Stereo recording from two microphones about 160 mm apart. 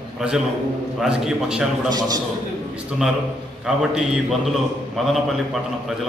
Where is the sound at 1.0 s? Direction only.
5° right (ahead or behind).